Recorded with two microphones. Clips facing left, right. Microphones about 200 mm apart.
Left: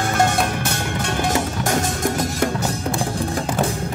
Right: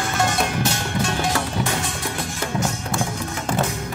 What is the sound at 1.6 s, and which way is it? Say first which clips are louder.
Music: left 5 dB; 45° left (ahead or behind).